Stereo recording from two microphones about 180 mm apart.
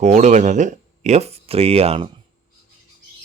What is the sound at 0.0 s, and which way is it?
Speech, 40° right (ahead or behind).